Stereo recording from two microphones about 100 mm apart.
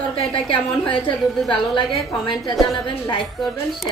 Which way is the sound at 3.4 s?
Centre (ahead or behind).